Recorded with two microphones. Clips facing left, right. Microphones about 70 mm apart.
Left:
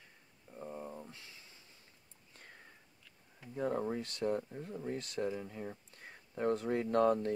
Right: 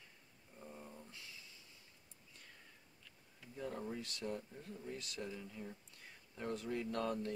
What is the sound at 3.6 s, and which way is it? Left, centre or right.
Speech, left.